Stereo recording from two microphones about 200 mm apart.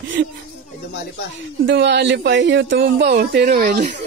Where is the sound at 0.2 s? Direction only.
60° right (ahead or behind).